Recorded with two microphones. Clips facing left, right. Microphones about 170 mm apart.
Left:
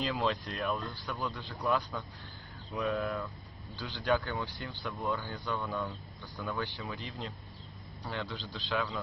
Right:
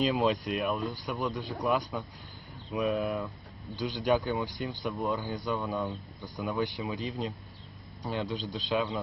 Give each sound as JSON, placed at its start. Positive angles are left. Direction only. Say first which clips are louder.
{"t": 0.0, "sound": "speech", "louder": "right 5 dB", "side_deg": -15}